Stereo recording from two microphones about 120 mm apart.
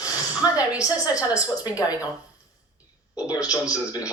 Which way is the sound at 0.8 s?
30° left (ahead or behind).